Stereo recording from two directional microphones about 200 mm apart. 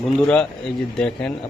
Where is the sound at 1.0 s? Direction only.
5° left (ahead or behind).